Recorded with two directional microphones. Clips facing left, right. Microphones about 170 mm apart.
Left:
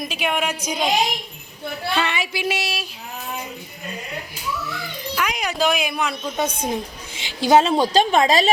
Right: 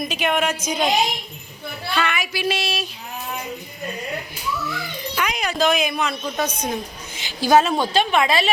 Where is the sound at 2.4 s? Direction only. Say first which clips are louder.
Right 4 dB; 10° left (ahead or behind).